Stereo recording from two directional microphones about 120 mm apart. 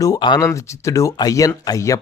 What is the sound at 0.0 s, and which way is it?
Speech, 35° left (ahead or behind).